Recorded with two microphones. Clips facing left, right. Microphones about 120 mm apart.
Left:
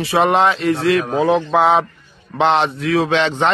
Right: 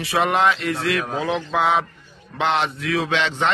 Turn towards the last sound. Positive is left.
turn(degrees=35)  # may be behind; listen again after turning